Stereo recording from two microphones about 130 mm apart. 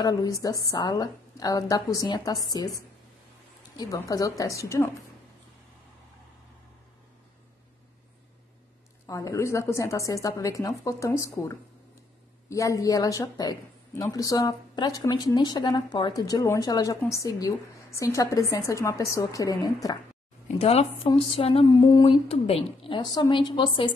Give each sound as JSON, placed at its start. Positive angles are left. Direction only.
{"t": 0.0, "sound": "a woman's voice", "side_deg": 25}
{"t": 3.7, "sound": "a woman's voice", "side_deg": 30}
{"t": 9.0, "sound": "a woman's voice", "side_deg": 25}
{"t": 20.4, "sound": "speech", "side_deg": 55}
{"t": 21.6, "sound": "a woman's voice", "side_deg": 30}
{"t": 22.3, "sound": "a woman's voice", "side_deg": 45}